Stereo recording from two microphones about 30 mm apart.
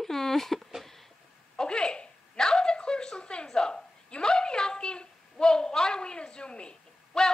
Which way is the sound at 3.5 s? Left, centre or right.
Left.